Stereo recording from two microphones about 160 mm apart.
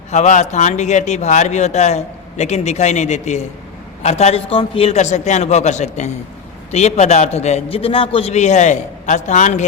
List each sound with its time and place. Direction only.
0.1 s speech: 50° left (ahead or behind)